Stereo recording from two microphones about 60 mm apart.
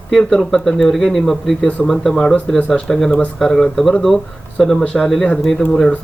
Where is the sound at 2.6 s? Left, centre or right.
Centre.